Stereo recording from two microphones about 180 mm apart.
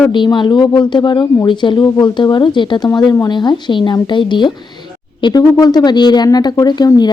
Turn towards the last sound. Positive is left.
turn(degrees=20)  # may be behind; listen again after turning